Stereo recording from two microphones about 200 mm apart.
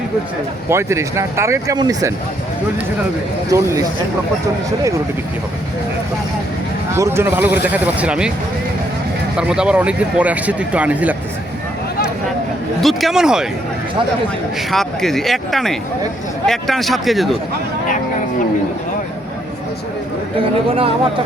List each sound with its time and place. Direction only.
0.7 s speech: 15° right (ahead or behind)
3.5 s speech: 15° right (ahead or behind)
6.9 s speech: 15° right (ahead or behind)
9.4 s speech: 5° right (ahead or behind)
12.8 s speech: centre (ahead or behind)
14.7 s speech: centre (ahead or behind)